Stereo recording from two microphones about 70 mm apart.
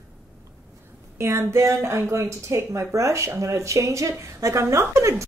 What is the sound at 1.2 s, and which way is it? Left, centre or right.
Speech, right.